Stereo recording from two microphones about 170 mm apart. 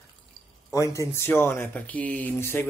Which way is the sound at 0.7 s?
20° left (ahead or behind).